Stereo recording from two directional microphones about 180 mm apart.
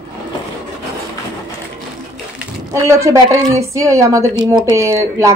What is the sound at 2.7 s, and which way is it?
A woman's voice, 15° right (ahead or behind).